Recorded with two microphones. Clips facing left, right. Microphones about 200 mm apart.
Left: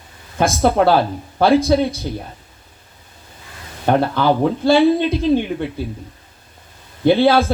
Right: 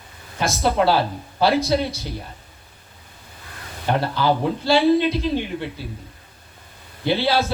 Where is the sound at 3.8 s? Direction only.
55° left (ahead or behind).